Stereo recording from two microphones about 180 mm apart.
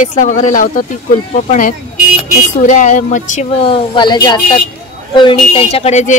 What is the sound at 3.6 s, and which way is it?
A woman's voice, 30° left (ahead or behind).